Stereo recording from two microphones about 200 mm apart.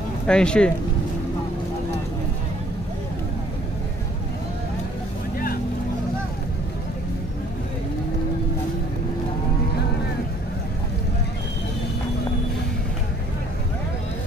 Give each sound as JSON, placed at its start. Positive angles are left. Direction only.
{"t": 0.3, "sound": "speech", "side_deg": 5}